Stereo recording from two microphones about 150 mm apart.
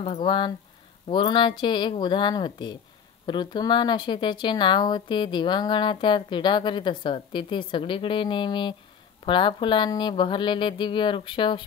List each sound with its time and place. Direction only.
0.0 s speech: 35° left (ahead or behind)